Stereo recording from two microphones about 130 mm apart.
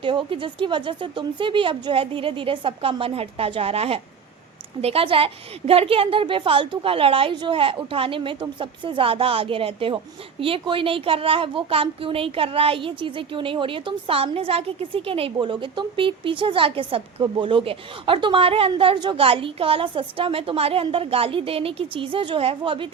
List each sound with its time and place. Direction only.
0.0 s a woman's voice: 40° right (ahead or behind)